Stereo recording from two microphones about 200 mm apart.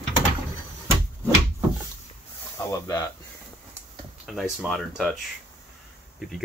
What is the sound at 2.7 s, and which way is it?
Speech, 15° left (ahead or behind).